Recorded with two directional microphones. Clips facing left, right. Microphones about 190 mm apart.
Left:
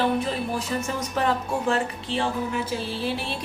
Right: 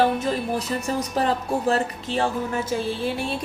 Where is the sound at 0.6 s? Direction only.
35° right (ahead or behind).